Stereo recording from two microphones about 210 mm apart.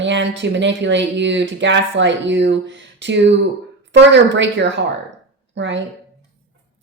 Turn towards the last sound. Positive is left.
turn(degrees=-60)  # may be behind; listen again after turning